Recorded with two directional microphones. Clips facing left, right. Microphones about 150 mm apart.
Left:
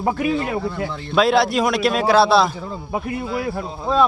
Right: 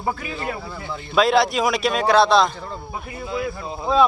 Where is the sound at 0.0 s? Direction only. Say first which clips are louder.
Left 7 dB; 75° left (ahead or behind).